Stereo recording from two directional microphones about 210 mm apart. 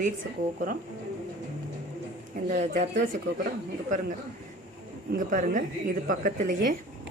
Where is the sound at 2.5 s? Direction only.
35° right (ahead or behind).